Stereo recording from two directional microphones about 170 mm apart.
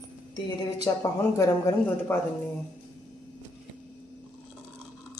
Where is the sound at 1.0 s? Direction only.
20° left (ahead or behind).